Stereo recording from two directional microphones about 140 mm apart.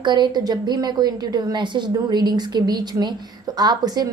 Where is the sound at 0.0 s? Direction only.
30° right (ahead or behind).